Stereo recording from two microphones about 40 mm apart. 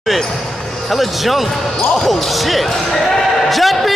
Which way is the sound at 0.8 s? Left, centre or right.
Centre.